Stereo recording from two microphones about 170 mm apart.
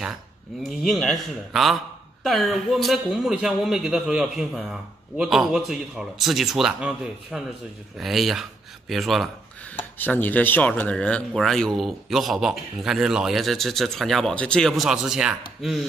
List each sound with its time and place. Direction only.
0.7 s speech: centre (ahead or behind)
9.9 s speech: 10° left (ahead or behind)